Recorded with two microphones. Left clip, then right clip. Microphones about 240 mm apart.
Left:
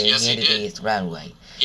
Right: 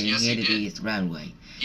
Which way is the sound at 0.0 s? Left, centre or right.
Left.